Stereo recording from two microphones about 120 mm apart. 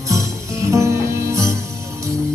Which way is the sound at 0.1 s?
25° right (ahead or behind).